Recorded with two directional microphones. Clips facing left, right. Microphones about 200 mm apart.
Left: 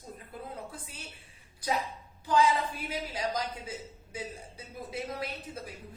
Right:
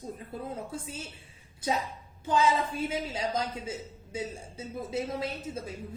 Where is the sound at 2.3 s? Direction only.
25° right (ahead or behind).